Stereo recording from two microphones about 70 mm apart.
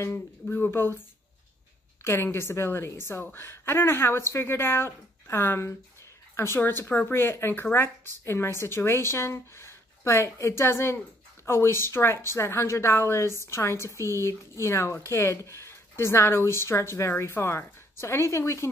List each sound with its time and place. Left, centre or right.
0.1 s a woman's voice: left
2.0 s a woman's voice: left